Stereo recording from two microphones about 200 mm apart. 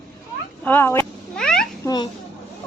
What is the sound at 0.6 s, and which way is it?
Cat, 10° left (ahead or behind).